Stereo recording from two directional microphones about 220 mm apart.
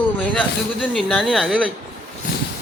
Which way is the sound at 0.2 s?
5° left (ahead or behind).